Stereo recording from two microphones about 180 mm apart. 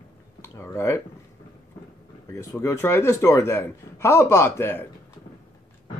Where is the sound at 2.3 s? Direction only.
15° left (ahead or behind).